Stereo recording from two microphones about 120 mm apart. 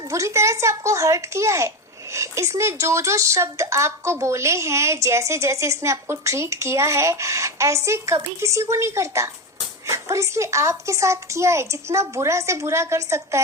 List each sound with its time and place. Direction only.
0.0 s a child's voice: 25° right (ahead or behind)